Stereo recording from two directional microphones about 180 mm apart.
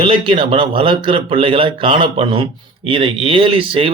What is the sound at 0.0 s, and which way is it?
A man's voice, 30° right (ahead or behind).